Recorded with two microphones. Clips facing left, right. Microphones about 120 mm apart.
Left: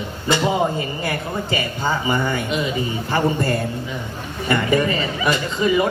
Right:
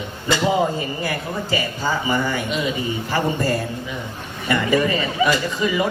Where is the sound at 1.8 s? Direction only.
25° left (ahead or behind).